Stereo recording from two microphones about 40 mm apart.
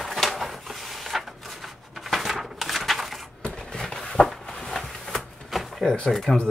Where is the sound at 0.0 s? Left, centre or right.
Centre.